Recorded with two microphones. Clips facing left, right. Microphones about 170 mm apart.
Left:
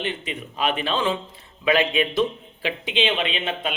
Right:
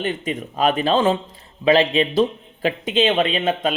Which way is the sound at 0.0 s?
45° right (ahead or behind).